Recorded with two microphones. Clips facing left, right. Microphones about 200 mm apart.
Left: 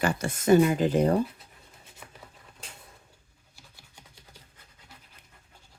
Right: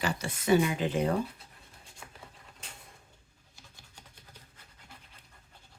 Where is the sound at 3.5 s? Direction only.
5° left (ahead or behind).